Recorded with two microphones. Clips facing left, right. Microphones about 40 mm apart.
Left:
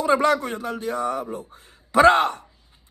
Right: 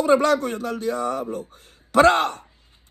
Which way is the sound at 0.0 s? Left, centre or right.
Left.